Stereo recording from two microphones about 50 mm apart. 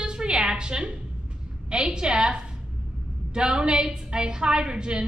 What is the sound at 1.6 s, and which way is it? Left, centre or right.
A woman's voice, centre.